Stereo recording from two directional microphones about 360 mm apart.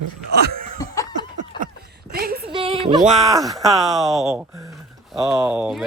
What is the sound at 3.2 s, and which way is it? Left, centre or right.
A woman's voice, centre.